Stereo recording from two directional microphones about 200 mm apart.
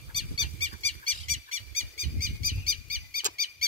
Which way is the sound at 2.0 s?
45° right (ahead or behind).